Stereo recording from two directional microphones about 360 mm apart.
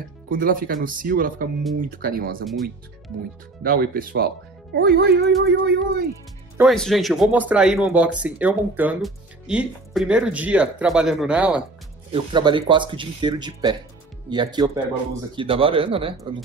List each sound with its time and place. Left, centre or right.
0.3 s speech: right
2.4 s speech: centre
3.6 s speech: right
6.6 s speech: centre